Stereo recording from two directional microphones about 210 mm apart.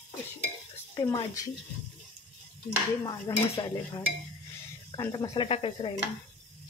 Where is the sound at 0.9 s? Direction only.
15° left (ahead or behind).